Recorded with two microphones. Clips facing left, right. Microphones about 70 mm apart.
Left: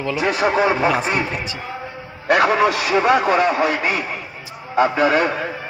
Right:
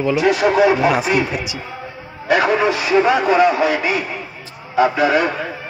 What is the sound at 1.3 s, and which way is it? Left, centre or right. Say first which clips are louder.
Speech: right 2 dB; centre.